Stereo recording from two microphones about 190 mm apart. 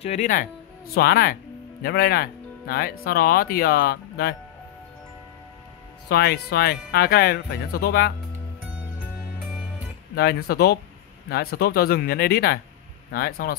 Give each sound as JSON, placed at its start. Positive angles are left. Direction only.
{"t": 0.0, "sound": "speech", "side_deg": 40}
{"t": 6.0, "sound": "music", "side_deg": 55}
{"t": 10.1, "sound": "music", "side_deg": 55}
{"t": 13.1, "sound": "speech", "side_deg": 50}